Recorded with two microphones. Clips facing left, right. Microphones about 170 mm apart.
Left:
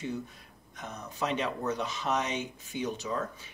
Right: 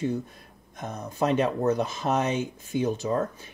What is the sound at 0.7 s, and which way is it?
Speech, 50° right (ahead or behind).